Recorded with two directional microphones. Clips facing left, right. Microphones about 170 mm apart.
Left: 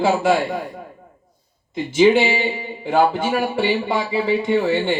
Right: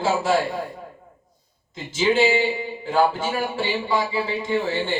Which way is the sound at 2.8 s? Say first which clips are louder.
Left 4 dB; 60° left (ahead or behind).